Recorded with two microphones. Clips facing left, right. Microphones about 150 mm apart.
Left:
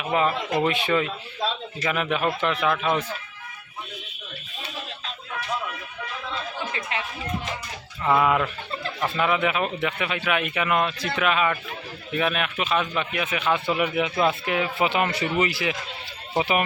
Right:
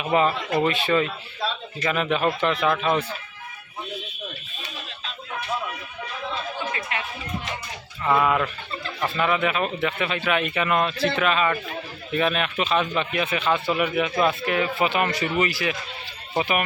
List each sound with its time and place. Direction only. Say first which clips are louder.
0.0 s speech: right 2 dB; centre (ahead or behind)
0.3 s speech: right 1 dB; 15° left (ahead or behind)
6.9 s speech: left 3 dB; 30° left (ahead or behind)
8.0 s speech: even; 10° left (ahead or behind)
9.2 s speech: even; 15° left (ahead or behind)